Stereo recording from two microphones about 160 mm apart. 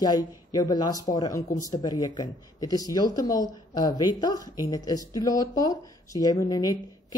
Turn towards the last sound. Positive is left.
turn(degrees=25)  # may be behind; listen again after turning